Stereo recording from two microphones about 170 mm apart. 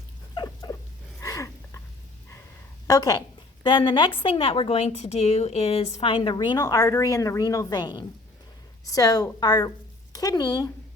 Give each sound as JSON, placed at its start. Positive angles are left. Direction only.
{"t": 0.3, "sound": "rodents", "side_deg": 25}
{"t": 1.2, "sound": "a sound", "side_deg": 20}
{"t": 2.8, "sound": "a woman's voice", "side_deg": 20}